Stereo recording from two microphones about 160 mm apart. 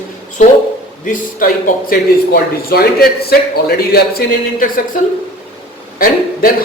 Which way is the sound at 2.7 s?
70° left (ahead or behind).